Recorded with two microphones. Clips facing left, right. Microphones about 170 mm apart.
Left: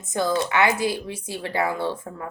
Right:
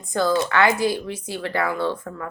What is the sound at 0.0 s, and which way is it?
Speech, 20° left (ahead or behind).